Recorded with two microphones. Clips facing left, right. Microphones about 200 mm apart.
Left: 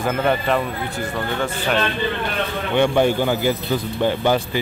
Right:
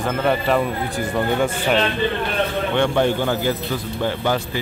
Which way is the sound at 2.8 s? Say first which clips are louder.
Left 3 dB; 10° left (ahead or behind).